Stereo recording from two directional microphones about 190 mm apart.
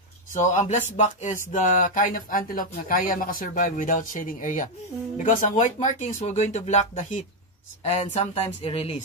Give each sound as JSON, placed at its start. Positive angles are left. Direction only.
{"t": 0.3, "sound": "speech", "side_deg": 40}